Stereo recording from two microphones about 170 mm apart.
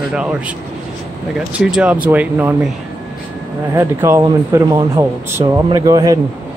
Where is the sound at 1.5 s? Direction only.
5° right (ahead or behind).